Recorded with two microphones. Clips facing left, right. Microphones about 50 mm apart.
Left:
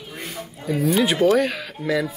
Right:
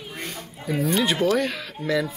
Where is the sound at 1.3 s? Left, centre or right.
Centre.